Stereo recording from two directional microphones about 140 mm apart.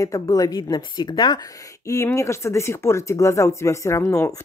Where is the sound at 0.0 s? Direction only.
25° left (ahead or behind).